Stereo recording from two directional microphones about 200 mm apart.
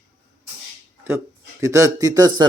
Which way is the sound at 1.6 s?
15° right (ahead or behind).